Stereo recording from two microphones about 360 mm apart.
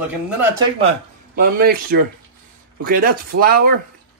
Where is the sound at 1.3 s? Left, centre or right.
Right.